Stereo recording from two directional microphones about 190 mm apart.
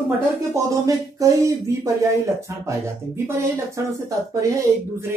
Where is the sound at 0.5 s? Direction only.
15° right (ahead or behind).